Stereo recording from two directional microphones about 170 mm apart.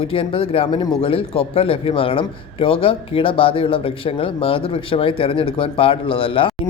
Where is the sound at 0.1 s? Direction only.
30° left (ahead or behind).